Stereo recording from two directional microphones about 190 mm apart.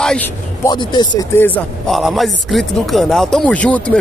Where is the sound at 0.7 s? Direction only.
25° left (ahead or behind).